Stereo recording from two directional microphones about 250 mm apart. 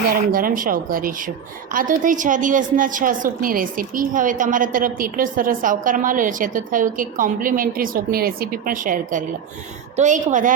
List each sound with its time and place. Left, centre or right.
0.1 s a woman's voice: right